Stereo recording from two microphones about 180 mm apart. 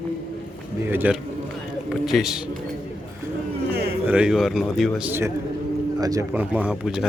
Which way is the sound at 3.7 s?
60° right (ahead or behind).